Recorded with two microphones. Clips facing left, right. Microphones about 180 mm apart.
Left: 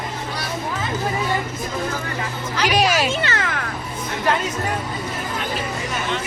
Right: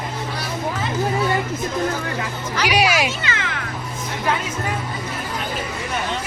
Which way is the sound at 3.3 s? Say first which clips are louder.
Left 2 dB; 40° left (ahead or behind).